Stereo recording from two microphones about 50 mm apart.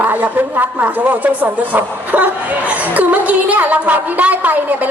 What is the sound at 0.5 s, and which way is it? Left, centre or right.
A woman's voice, right.